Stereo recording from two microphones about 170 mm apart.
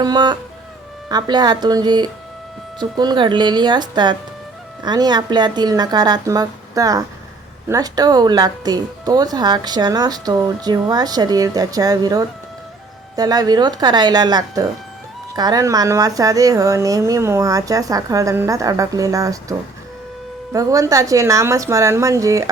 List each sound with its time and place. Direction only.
0.0 s speech: 25° right (ahead or behind)